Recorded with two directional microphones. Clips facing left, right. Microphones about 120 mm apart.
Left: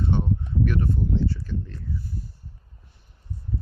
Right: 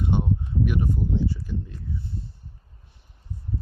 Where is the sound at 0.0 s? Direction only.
15° right (ahead or behind).